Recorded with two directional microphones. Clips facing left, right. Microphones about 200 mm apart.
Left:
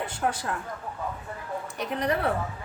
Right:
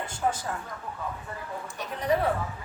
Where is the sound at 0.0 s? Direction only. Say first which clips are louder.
Left 1 dB; 65° left (ahead or behind).